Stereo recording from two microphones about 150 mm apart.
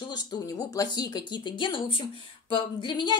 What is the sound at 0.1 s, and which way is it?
A woman's voice, 25° left (ahead or behind).